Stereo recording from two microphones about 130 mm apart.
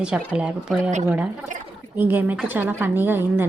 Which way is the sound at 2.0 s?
15° right (ahead or behind).